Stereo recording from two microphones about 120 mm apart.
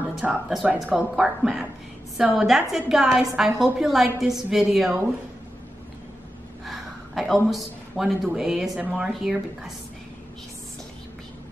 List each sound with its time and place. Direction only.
0.1 s a woman's voice: 5° right (ahead or behind)
6.6 s a woman's voice: centre (ahead or behind)